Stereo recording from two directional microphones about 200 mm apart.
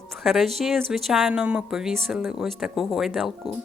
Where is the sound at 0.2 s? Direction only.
Centre (ahead or behind).